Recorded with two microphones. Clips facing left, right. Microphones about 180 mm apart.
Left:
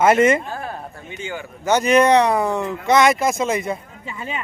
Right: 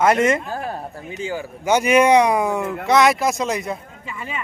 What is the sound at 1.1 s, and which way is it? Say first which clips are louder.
Speech: right 3 dB; 35° right (ahead or behind).